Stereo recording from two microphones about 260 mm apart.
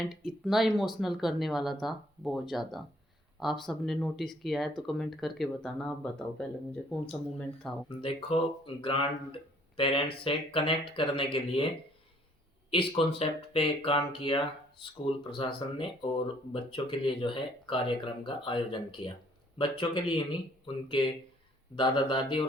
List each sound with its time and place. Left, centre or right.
0.0 s speech: centre
7.9 s speech: left
12.7 s speech: left